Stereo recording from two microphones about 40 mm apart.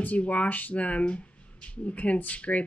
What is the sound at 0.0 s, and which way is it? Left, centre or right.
Speech, left.